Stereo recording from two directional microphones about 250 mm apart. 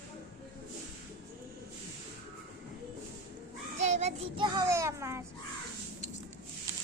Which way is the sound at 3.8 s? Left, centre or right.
Right.